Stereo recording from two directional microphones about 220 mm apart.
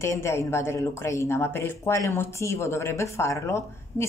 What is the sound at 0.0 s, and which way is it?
A man's voice, 10° left (ahead or behind).